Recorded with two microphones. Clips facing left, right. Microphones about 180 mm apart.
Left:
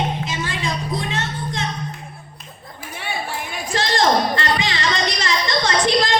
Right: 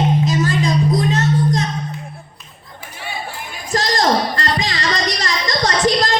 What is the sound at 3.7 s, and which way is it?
Music, 40° right (ahead or behind).